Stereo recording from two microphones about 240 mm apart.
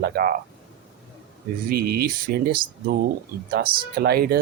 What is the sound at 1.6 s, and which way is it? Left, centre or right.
Speech, right.